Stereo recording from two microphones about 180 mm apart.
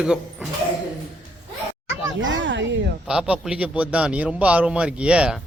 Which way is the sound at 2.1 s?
90° right.